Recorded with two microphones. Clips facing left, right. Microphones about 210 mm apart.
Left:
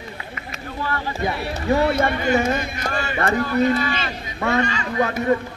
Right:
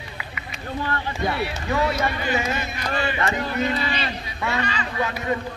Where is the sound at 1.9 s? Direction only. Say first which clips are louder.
Left 5 dB; 55° left (ahead or behind).